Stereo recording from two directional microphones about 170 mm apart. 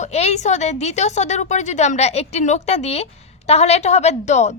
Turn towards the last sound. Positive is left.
turn(degrees=40)  # may be behind; listen again after turning